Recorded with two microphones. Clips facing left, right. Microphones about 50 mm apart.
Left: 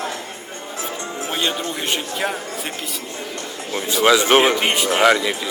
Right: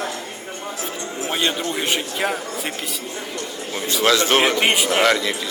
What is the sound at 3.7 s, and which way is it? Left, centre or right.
Speech, centre.